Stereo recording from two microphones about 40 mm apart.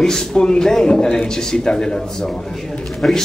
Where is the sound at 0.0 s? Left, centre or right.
Centre.